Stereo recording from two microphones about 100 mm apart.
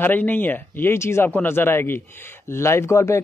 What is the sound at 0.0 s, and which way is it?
Speech, 20° left (ahead or behind).